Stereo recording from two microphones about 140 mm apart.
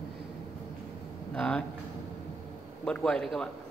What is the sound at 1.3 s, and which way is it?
Speech, 10° left (ahead or behind).